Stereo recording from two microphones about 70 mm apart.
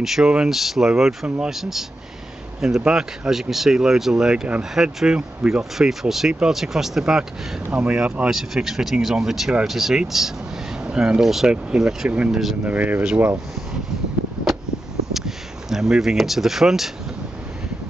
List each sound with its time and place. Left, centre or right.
0.0 s speech: centre; by 13.0 s right
15.1 s speech: centre